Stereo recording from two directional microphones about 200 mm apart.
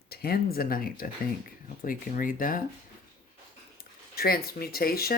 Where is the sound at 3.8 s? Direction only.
50° left (ahead or behind).